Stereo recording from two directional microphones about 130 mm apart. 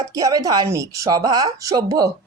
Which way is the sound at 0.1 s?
25° right (ahead or behind).